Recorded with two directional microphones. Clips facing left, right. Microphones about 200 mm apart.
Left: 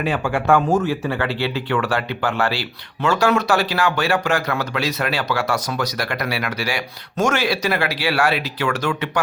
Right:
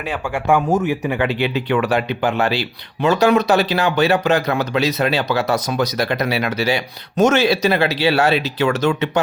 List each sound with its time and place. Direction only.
0.0 s speech: 10° right (ahead or behind)